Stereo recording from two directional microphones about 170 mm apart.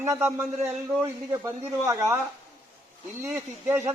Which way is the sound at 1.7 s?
15° right (ahead or behind).